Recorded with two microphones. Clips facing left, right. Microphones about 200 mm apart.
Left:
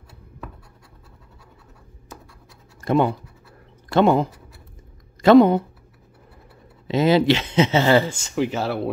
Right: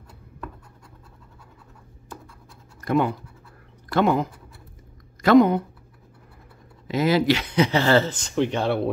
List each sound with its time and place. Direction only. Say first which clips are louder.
2.8 s speech: left 3 dB; 25° left (ahead or behind)
6.9 s speech: left 3 dB; 25° left (ahead or behind); by 8.9 s centre (ahead or behind)